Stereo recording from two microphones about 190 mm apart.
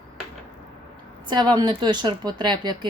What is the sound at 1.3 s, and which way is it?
Speech, 25° right (ahead or behind).